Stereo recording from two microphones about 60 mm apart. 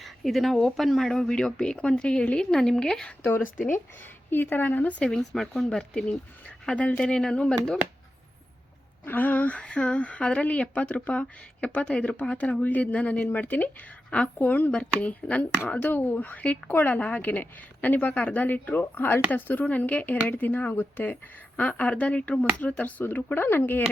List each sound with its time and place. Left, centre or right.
0.0 s speech: centre
3.2 s speech: left
5.1 s a woman's voice: centre
9.0 s a woman's voice: left
23.0 s speech: left